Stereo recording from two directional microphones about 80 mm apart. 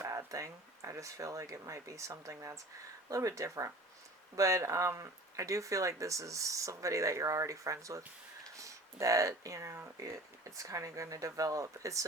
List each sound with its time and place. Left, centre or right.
0.3 s speech: right